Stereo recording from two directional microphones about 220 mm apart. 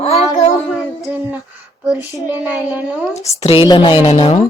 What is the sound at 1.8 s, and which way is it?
Speech, 15° left (ahead or behind).